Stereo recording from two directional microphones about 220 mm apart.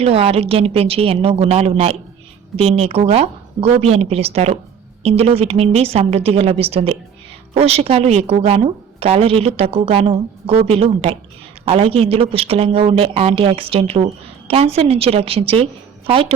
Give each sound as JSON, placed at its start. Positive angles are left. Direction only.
{"t": 0.0, "sound": "speech", "side_deg": -25}